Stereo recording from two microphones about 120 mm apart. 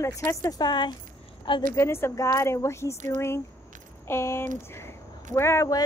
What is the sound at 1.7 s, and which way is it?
A woman's voice, 20° left (ahead or behind).